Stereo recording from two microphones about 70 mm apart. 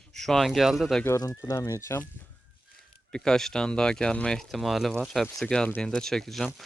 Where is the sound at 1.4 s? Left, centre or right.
Left.